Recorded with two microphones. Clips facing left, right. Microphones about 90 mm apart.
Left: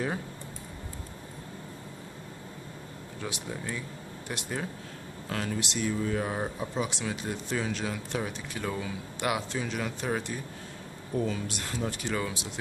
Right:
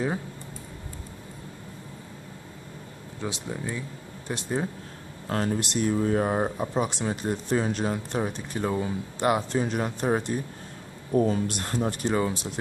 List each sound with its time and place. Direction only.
3.2 s speech: 25° right (ahead or behind)
5.3 s speech: 40° right (ahead or behind)